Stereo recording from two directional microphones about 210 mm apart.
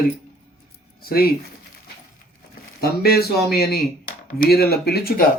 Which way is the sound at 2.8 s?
45° left (ahead or behind).